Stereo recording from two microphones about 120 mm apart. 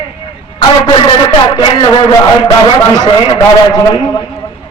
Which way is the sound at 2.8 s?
30° left (ahead or behind).